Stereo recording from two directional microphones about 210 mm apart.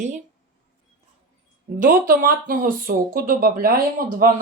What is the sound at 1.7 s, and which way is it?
Speech, 40° right (ahead or behind).